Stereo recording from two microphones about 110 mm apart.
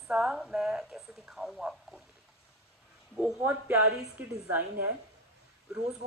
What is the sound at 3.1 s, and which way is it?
A man's voice, 15° right (ahead or behind).